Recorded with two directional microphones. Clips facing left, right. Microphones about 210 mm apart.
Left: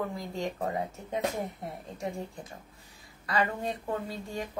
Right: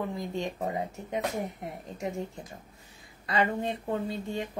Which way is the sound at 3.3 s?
25° right (ahead or behind).